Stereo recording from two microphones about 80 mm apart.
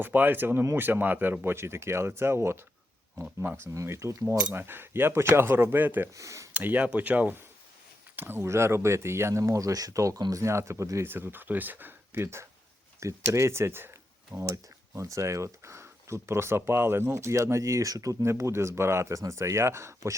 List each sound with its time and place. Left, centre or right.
0.0 s speech: right
3.8 s speech: right
4.5 s speech: right
6.1 s speech: right
6.5 s speech: right
10.2 s speech: right
10.4 s speech: right
11.0 s speech: right
14.4 s speech: right